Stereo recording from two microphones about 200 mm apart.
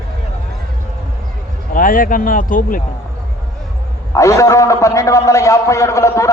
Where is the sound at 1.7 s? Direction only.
45° left (ahead or behind).